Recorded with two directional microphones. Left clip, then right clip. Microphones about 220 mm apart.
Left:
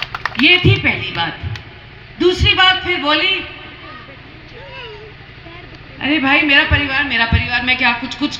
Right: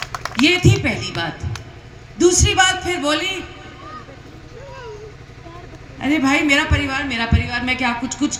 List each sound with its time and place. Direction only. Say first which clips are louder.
0.2 s a man's voice: left 5 dB; 65° right (ahead or behind)
6.0 s a man's voice: left 4 dB; 65° right (ahead or behind)